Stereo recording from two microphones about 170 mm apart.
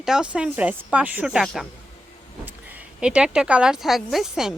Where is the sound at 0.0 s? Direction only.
5° right (ahead or behind).